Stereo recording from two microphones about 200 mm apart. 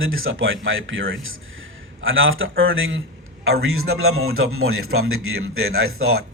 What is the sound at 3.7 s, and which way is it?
A man's voice, 90° right.